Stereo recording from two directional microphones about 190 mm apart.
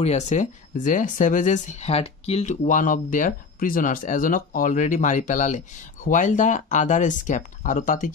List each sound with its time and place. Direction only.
0.0 s speech: 35° left (ahead or behind)